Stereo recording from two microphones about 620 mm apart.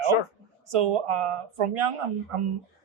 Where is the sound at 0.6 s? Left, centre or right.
Right.